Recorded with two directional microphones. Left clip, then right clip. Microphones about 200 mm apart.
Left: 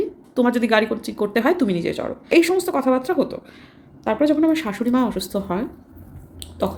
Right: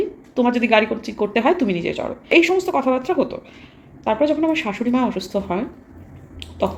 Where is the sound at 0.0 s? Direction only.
20° left (ahead or behind).